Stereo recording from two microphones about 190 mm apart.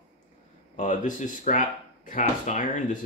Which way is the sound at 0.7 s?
40° left (ahead or behind).